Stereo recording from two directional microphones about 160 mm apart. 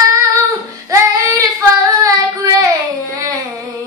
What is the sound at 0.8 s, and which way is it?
Child singing, 20° right (ahead or behind).